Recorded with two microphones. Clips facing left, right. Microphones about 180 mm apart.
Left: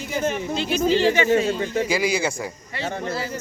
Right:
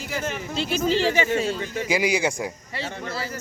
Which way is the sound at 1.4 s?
40° left (ahead or behind).